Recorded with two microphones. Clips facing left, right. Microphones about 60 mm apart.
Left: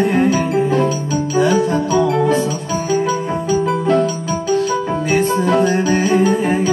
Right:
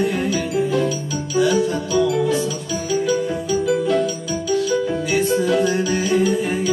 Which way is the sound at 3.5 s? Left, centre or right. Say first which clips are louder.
Left 3 dB; left.